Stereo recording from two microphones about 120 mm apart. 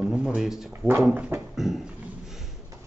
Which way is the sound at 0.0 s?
5° right (ahead or behind).